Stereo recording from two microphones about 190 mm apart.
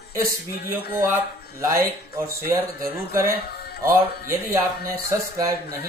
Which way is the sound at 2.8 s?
15° right (ahead or behind).